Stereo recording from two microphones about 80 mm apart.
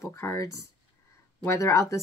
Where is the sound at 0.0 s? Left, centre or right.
Left.